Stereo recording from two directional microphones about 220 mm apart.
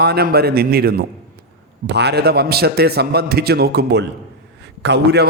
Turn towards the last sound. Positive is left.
turn(degrees=-50)  # may be behind; listen again after turning